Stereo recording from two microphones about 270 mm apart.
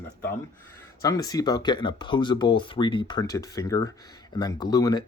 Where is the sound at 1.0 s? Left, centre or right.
Centre.